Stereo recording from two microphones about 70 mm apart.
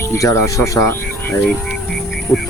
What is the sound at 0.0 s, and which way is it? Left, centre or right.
Speech, left.